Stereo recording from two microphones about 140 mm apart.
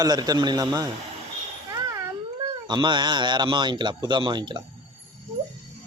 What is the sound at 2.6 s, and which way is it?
Speech, 30° right (ahead or behind).